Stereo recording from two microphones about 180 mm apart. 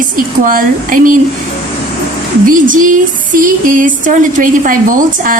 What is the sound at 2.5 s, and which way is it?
A woman's voice, 50° right (ahead or behind).